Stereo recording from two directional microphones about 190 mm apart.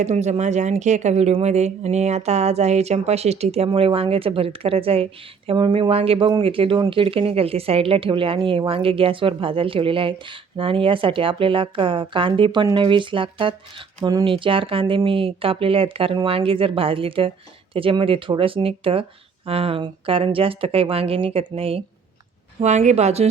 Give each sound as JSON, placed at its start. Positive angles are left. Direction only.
{"t": 0.0, "sound": "speech", "side_deg": -35}